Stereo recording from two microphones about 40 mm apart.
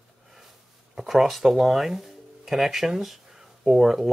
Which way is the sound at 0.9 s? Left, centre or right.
Centre.